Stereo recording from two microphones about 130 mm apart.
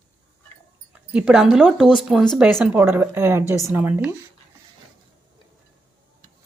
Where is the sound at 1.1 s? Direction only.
5° right (ahead or behind).